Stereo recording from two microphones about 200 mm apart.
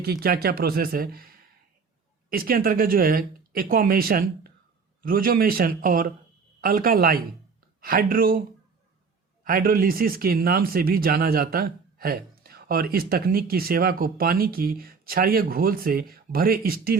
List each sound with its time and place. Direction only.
0.0 s speech: 50° right (ahead or behind)
9.4 s speech: 45° right (ahead or behind)